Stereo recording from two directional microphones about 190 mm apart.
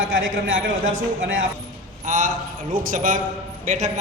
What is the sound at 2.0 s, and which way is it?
A man's voice, 45° right (ahead or behind).